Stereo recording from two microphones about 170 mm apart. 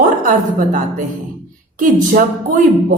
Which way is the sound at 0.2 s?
50° right (ahead or behind).